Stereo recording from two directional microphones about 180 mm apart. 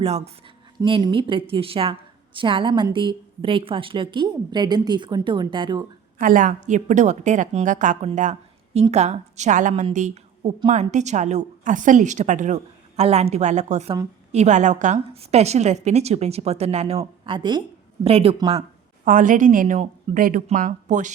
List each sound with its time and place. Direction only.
0.0 s a woman's voice: 35° right (ahead or behind)
0.8 s a woman's voice: 25° right (ahead or behind)
6.1 s a woman's voice: 50° right (ahead or behind)
19.0 s a woman's voice: 50° right (ahead or behind)